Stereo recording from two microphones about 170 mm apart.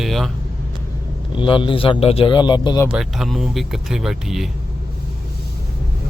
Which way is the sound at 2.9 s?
5° right (ahead or behind).